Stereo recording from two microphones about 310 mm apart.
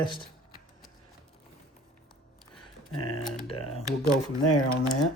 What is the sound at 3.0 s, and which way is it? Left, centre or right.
Speech, left.